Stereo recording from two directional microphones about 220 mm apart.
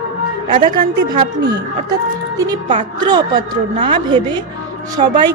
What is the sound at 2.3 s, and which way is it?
Speech, 15° right (ahead or behind).